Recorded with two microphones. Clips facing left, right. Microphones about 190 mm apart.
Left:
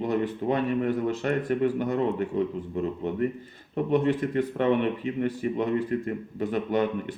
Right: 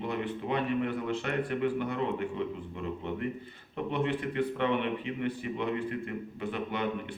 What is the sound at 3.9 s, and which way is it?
A man's voice, 40° left (ahead or behind).